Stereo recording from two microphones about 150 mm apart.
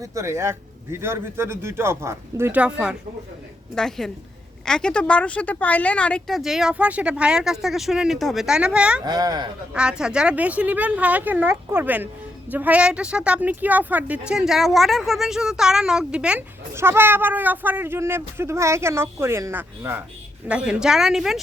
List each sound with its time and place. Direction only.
0.0 s a woman's voice: 20° right (ahead or behind)
9.0 s speech: 25° right (ahead or behind)
9.7 s a woman's voice: 5° right (ahead or behind)